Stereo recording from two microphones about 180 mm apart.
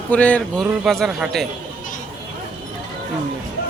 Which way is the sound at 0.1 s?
5° left (ahead or behind).